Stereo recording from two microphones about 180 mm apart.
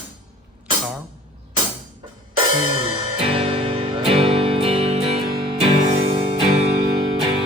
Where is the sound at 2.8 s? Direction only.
30° right (ahead or behind).